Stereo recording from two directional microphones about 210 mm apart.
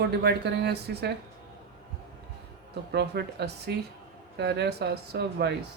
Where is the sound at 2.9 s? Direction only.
50° right (ahead or behind).